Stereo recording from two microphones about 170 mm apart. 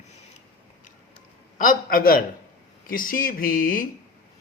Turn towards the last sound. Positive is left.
turn(degrees=55)  # may be behind; listen again after turning